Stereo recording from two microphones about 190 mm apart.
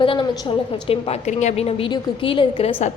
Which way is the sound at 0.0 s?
25° left (ahead or behind).